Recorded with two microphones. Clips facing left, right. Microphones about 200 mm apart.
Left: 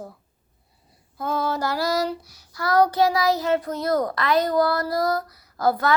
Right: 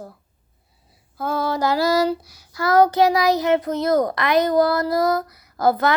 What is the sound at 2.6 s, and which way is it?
A child's voice, 25° right (ahead or behind).